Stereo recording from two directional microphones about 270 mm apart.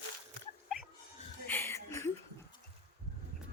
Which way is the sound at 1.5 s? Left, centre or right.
Centre.